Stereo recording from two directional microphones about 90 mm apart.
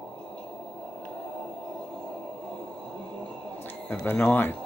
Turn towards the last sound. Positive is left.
turn(degrees=20)  # may be behind; listen again after turning